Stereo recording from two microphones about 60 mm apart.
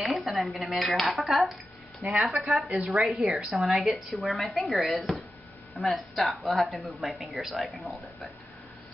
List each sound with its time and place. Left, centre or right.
0.0 s speech: centre
2.0 s speech: right
2.9 s speech: centre
3.3 s a woman's voice: centre
3.8 s speech: centre